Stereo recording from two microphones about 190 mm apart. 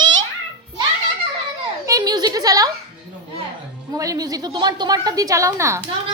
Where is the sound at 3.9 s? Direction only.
20° right (ahead or behind).